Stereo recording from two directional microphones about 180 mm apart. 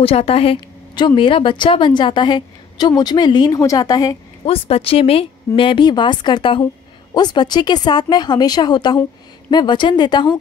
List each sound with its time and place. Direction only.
0.0 s a woman's voice: 30° left (ahead or behind)
4.5 s a woman's voice: 35° left (ahead or behind)